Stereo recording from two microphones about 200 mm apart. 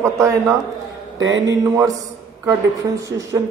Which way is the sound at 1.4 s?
15° right (ahead or behind).